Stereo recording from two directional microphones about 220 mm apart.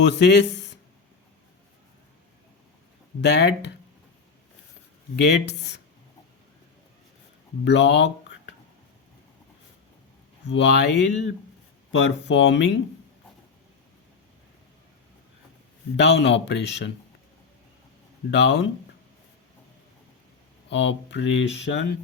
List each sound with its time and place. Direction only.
0.0 s speech: 50° left (ahead or behind)
3.2 s speech: 50° left (ahead or behind)
5.1 s speech: 50° left (ahead or behind)
7.6 s speech: 55° left (ahead or behind)
10.4 s speech: 55° left (ahead or behind)
16.0 s speech: 55° left (ahead or behind)
18.3 s speech: 50° left (ahead or behind)
20.7 s speech: 55° left (ahead or behind)